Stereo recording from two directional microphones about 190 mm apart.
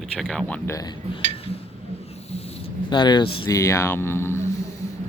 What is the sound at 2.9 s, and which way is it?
Speech, 25° left (ahead or behind).